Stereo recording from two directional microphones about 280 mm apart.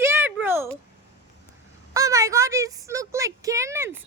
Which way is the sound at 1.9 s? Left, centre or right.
Centre.